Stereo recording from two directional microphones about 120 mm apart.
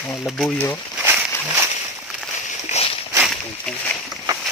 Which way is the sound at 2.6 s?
65° left (ahead or behind).